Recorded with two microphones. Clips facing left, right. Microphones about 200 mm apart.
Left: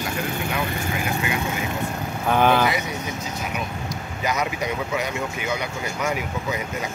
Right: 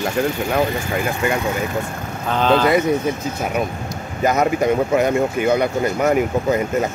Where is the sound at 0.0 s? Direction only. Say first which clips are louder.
Right 7 dB; 50° right (ahead or behind).